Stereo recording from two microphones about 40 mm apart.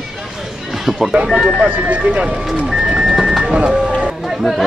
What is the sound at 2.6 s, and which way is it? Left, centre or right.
Music, centre.